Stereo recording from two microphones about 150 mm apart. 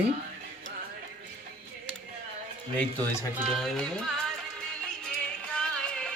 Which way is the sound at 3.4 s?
Centre (ahead or behind).